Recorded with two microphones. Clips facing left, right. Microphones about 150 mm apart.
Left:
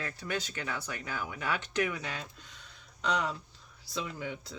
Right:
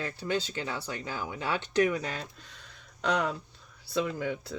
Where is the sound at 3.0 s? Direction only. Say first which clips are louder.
Right 3 dB; 60° right (ahead or behind).